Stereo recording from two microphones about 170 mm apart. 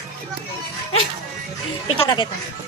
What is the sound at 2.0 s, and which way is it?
Speech, 25° left (ahead or behind).